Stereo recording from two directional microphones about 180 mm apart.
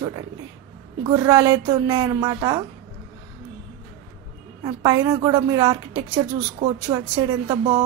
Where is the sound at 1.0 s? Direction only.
20° right (ahead or behind).